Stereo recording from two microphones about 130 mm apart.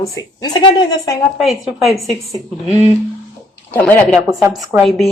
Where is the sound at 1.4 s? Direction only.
Centre (ahead or behind).